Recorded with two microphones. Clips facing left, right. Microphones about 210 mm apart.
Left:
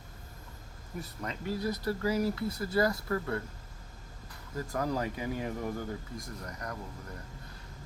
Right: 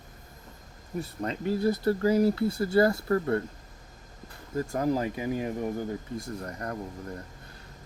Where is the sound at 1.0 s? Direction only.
30° right (ahead or behind).